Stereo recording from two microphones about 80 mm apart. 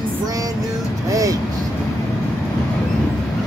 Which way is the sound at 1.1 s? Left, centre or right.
Right.